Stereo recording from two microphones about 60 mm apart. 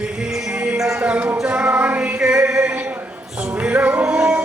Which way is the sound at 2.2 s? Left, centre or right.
Centre.